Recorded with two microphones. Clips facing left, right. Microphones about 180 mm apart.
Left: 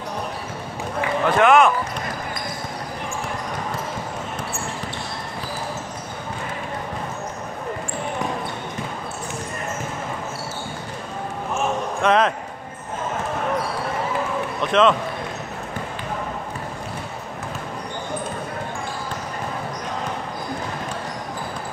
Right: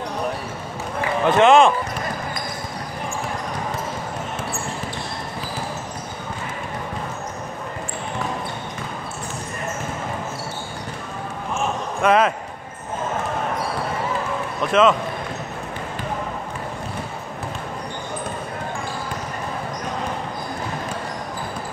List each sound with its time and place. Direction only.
1.3 s speech: 25° right (ahead or behind)
12.0 s speech: 5° right (ahead or behind)
14.7 s speech: 5° right (ahead or behind)